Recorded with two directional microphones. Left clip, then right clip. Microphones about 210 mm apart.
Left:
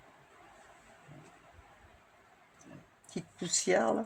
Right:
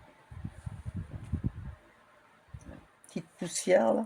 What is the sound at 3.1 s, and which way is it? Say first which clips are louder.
Speech: left 3 dB; 30° right (ahead or behind).